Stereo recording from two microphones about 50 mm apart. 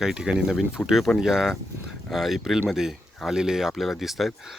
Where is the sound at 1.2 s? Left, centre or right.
Centre.